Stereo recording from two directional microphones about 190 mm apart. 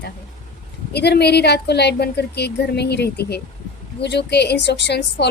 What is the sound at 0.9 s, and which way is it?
A woman's voice, 60° left (ahead or behind).